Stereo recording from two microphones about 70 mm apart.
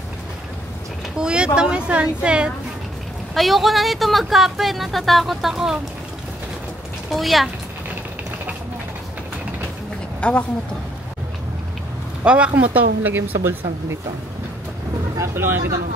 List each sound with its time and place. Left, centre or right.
1.1 s a sound: centre
3.3 s speech: centre
7.1 s speech: centre
10.2 s speech: centre
12.3 s speech: centre; by 13.9 s right
15.1 s speech: right